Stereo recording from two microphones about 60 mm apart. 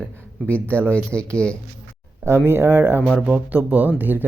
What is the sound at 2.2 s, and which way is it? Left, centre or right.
Speech, right.